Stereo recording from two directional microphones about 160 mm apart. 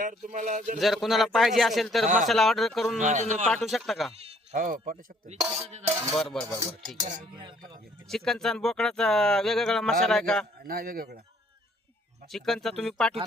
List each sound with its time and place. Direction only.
0.0 s speech: 50° right (ahead or behind)
0.8 s speech: centre (ahead or behind)
3.0 s speech: 50° right (ahead or behind)
3.4 s speech: centre (ahead or behind)
4.5 s speech: 60° right (ahead or behind)
5.4 s speech: 5° right (ahead or behind)
5.8 s a sound: 15° right (ahead or behind)
6.1 s speech: centre (ahead or behind)
8.1 s speech: 5° left (ahead or behind)
10.6 s a man's voice: 70° right (ahead or behind)
12.3 s speech: centre (ahead or behind)